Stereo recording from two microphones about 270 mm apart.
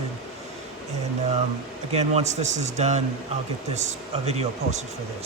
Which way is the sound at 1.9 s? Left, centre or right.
Right.